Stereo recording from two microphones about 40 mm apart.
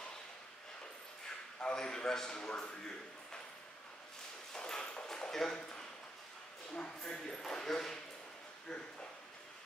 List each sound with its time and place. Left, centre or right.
1.6 s speech: centre
4.6 s a sound: centre
6.7 s speech: left